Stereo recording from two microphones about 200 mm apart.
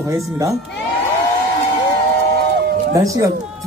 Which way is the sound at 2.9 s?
15° right (ahead or behind).